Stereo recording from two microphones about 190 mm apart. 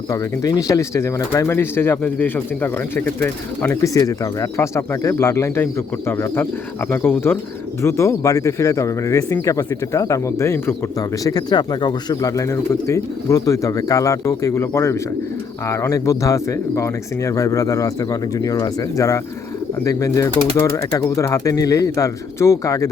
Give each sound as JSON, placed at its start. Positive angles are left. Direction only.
{"t": 0.1, "sound": "speech", "side_deg": 20}